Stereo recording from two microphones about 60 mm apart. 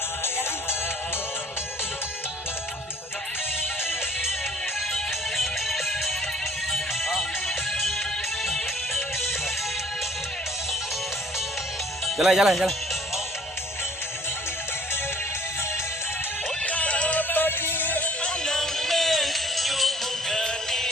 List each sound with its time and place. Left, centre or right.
5.4 s music: centre
12.0 s speech: centre
16.6 s music: left
18.2 s music: centre